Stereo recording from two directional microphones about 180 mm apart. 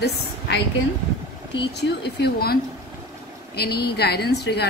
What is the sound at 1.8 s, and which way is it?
Speech, 65° left (ahead or behind).